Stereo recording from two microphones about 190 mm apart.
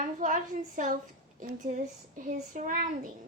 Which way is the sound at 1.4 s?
40° right (ahead or behind).